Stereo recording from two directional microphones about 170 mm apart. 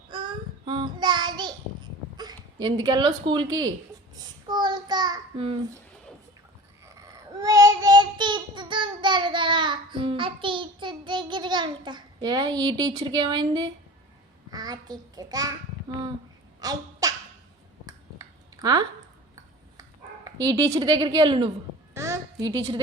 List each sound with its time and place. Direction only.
0.1 s child singing: 30° right (ahead or behind)
2.1 s speech: 25° right (ahead or behind)
4.4 s child singing: 25° right (ahead or behind)
6.8 s child singing: 20° right (ahead or behind)
14.5 s a child's voice: 25° right (ahead or behind)
16.6 s a sound: 20° right (ahead or behind)
20.2 s a woman's voice: 20° right (ahead or behind)
21.9 s a sound: 15° right (ahead or behind)